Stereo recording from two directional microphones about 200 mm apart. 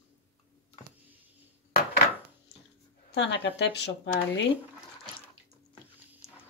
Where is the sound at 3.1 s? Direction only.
60° left (ahead or behind).